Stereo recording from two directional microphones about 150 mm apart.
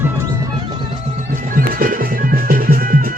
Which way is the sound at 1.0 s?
50° right (ahead or behind).